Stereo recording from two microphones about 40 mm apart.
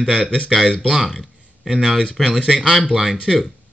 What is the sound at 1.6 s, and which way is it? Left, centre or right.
Speech, centre.